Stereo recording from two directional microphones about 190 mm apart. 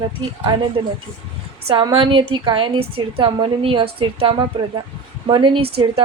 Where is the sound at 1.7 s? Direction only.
25° right (ahead or behind).